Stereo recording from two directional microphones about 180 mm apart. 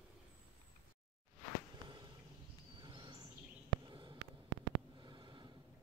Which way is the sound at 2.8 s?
25° right (ahead or behind).